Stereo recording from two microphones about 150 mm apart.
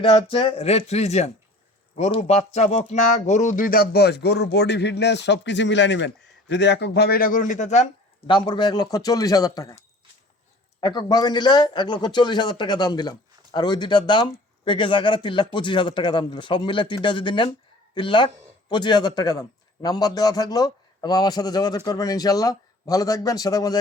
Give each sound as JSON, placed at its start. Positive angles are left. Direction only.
{"t": 0.0, "sound": "a man's voice", "side_deg": 35}
{"t": 6.9, "sound": "speech", "side_deg": 90}
{"t": 8.3, "sound": "a man's voice", "side_deg": 30}
{"t": 10.8, "sound": "a man's voice", "side_deg": 25}